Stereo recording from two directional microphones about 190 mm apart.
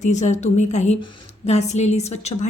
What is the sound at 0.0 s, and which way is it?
A woman's voice, 40° left (ahead or behind).